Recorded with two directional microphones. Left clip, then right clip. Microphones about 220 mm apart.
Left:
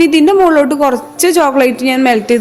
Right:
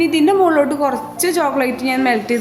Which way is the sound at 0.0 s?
25° left (ahead or behind).